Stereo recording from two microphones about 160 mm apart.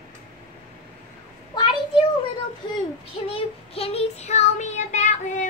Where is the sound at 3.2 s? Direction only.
35° left (ahead or behind).